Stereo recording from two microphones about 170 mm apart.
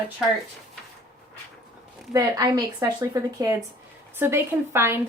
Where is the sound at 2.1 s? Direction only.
20° right (ahead or behind).